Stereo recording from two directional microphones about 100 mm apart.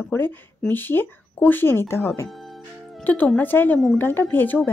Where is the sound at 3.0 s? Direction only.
15° left (ahead or behind).